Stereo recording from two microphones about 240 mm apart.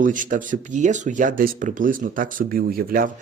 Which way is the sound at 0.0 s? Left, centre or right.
Right.